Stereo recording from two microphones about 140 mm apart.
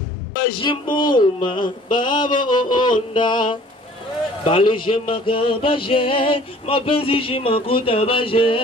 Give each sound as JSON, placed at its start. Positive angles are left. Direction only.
{"t": 0.6, "sound": "music", "side_deg": 35}